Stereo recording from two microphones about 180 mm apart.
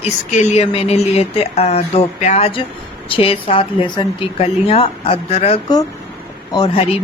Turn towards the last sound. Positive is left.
turn(degrees=30)  # may be behind; listen again after turning